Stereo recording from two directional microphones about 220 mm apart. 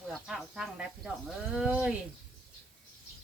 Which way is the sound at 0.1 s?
5° right (ahead or behind).